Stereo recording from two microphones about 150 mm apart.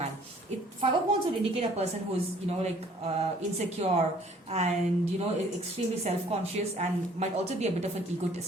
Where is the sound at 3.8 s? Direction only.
45° right (ahead or behind).